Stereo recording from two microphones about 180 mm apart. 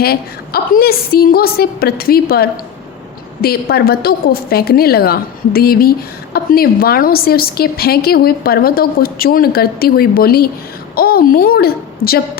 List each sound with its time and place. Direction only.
0.0 s a woman's voice: 60° left (ahead or behind)